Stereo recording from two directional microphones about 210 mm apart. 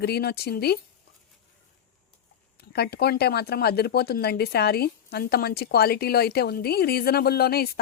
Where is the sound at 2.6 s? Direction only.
50° left (ahead or behind).